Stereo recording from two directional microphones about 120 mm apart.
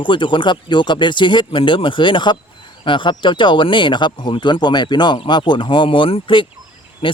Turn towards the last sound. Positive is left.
turn(degrees=45)  # may be behind; listen again after turning